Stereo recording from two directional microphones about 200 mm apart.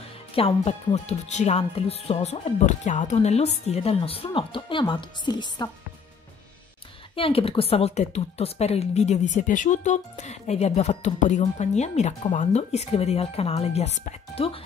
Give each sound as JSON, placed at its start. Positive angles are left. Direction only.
{"t": 0.4, "sound": "a woman's voice", "side_deg": 30}
{"t": 7.2, "sound": "a woman's voice", "side_deg": 25}